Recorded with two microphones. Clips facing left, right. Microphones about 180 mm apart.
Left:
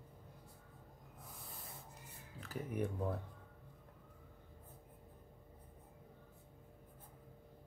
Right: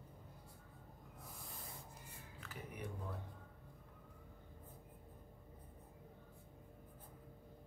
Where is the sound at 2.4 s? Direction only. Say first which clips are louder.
Left 10 dB; 45° left (ahead or behind).